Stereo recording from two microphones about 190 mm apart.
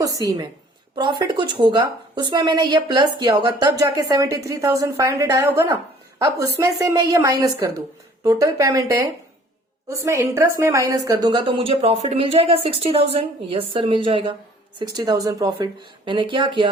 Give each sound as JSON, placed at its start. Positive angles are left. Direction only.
{"t": 0.0, "sound": "a woman's voice", "side_deg": -20}